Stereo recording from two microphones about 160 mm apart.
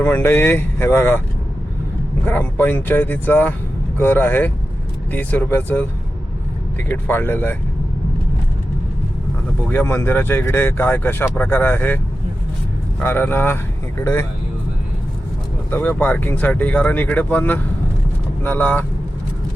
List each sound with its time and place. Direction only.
0.0 s speech: 15° left (ahead or behind)
2.2 s speech: 10° left (ahead or behind)
9.6 s speech: 15° left (ahead or behind)
13.0 s speech: 15° left (ahead or behind)
15.7 s speech: 10° left (ahead or behind)